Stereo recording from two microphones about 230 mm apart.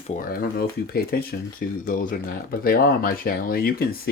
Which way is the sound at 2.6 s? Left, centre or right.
Left.